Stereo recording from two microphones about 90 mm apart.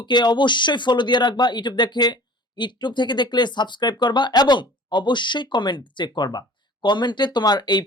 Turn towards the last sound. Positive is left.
turn(degrees=55)  # may be behind; listen again after turning